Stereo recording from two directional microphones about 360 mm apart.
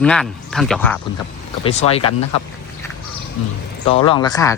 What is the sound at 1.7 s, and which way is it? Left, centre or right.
Speech, centre.